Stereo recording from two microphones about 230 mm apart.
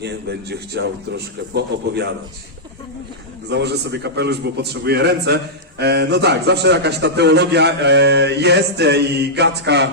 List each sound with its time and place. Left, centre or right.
0.0 s a man's voice: right
3.5 s a man's voice: right